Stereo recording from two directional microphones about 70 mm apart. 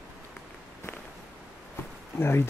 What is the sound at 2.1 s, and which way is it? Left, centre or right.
Speech, left.